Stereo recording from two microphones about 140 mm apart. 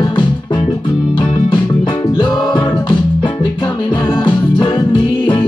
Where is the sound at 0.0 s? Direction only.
35° left (ahead or behind).